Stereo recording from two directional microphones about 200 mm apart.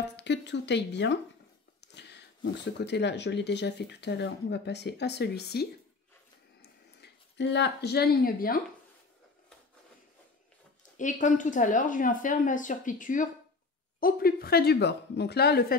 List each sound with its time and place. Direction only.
0.1 s speech: 60° left (ahead or behind)
11.0 s speech: 40° left (ahead or behind)